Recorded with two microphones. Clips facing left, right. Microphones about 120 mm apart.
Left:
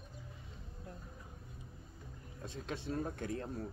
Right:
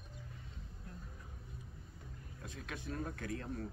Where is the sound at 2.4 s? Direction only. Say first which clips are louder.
Left 4 dB; 25° left (ahead or behind).